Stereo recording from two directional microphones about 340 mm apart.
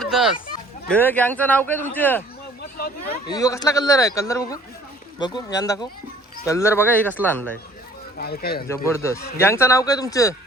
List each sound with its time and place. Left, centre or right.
0.0 s a sound: centre
0.9 s speech: centre
3.2 s a man's voice: centre
8.2 s speech: left
8.6 s a man's voice: centre